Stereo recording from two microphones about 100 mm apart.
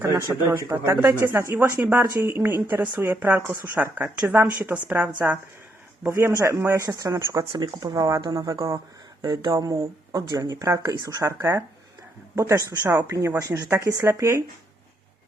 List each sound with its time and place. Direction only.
0.0 s a woman's voice: 30° right (ahead or behind); by 5.4 s 15° right (ahead or behind)
6.0 s speech: 25° right (ahead or behind)
7.5 s speech: 50° right (ahead or behind); by 14.4 s 30° right (ahead or behind)